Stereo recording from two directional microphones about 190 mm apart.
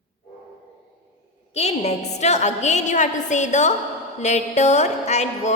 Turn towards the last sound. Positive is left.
turn(degrees=35)  # may be behind; listen again after turning